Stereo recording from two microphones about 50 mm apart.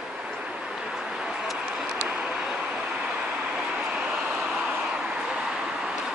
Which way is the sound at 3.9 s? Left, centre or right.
Right.